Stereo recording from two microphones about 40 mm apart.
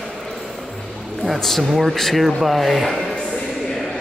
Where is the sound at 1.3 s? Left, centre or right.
Centre.